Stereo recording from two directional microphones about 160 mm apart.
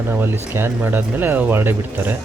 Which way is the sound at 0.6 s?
15° right (ahead or behind).